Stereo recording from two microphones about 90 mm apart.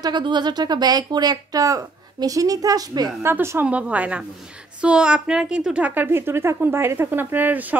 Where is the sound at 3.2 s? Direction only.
30° right (ahead or behind).